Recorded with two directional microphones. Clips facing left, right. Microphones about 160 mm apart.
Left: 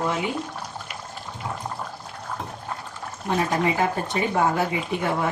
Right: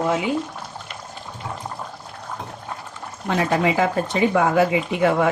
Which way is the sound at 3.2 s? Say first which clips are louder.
Right 3 dB; 90° right.